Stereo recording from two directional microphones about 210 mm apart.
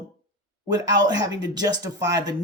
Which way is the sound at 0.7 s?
20° right (ahead or behind).